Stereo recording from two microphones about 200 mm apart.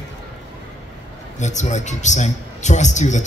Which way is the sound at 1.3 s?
35° left (ahead or behind).